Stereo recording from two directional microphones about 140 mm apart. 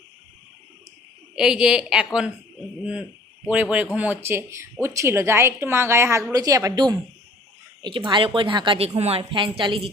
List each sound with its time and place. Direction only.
1.4 s a woman's voice: 5° right (ahead or behind); by 9.9 s 40° right (ahead or behind)